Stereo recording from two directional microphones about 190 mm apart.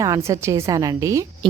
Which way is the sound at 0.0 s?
15° right (ahead or behind).